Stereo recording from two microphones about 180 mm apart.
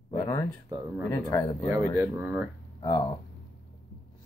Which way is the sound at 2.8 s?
25° left (ahead or behind).